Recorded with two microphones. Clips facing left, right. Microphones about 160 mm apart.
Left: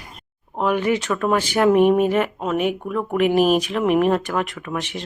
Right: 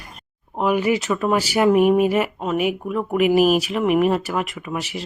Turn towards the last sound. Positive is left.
turn(degrees=-5)  # may be behind; listen again after turning